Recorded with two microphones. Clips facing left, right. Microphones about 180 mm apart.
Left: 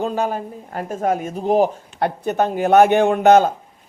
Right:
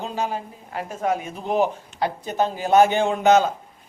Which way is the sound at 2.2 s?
60° left (ahead or behind).